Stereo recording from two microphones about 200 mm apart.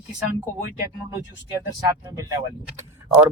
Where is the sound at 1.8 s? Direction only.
15° right (ahead or behind).